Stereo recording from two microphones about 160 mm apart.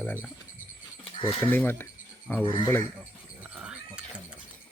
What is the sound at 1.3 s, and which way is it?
Speech, 10° left (ahead or behind).